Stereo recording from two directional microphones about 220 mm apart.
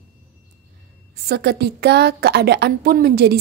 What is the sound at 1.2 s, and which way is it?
Speech, 45° right (ahead or behind).